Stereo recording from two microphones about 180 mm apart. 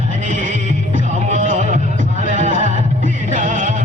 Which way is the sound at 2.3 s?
45° right (ahead or behind).